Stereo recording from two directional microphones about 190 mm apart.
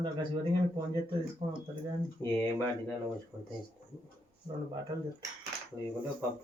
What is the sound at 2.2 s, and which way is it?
Speech, 10° left (ahead or behind).